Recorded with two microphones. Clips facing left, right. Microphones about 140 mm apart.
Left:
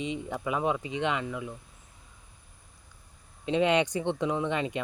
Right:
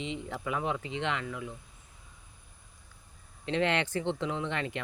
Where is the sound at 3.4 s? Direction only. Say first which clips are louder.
Left 5 dB; 15° left (ahead or behind).